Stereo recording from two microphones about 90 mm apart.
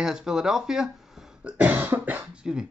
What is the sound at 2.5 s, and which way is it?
Speech, 5° right (ahead or behind).